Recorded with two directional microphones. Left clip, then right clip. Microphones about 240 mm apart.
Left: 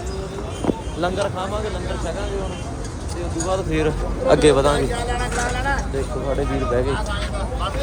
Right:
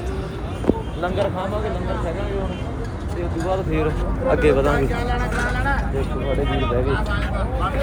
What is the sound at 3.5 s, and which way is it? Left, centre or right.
Speech, left.